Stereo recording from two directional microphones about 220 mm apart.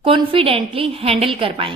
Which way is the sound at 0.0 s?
25° right (ahead or behind).